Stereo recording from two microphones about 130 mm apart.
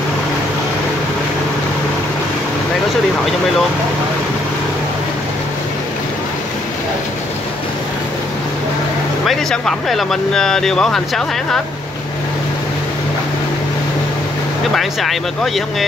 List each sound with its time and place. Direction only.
9.2 s speech: centre (ahead or behind)
14.7 s speech: centre (ahead or behind)